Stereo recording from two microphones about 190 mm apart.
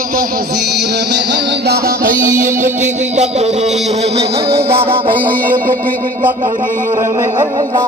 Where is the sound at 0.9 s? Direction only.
65° right (ahead or behind).